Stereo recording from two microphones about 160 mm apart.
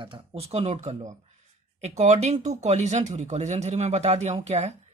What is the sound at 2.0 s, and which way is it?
Speech, 45° right (ahead or behind).